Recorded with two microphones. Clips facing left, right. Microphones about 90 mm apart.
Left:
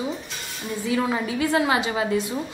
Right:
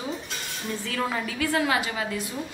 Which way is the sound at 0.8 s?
15° left (ahead or behind).